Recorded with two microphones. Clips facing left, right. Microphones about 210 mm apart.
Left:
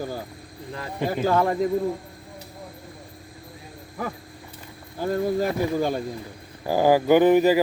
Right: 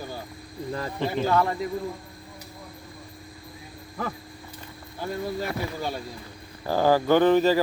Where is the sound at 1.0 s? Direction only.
45° left (ahead or behind).